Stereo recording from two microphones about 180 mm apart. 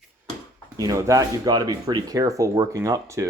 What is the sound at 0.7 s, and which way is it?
Speech, 20° right (ahead or behind).